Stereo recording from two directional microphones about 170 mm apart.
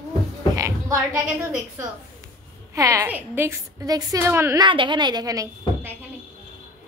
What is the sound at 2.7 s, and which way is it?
A woman's voice, 20° right (ahead or behind).